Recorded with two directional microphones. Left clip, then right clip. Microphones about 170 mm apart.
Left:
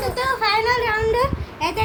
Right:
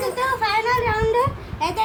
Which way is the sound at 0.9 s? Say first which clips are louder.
Even; 10° right (ahead or behind).